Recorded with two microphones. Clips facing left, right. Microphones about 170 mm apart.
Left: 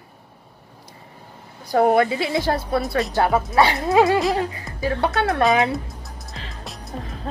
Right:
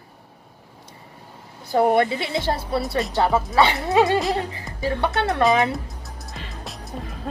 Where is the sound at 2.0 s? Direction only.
25° right (ahead or behind).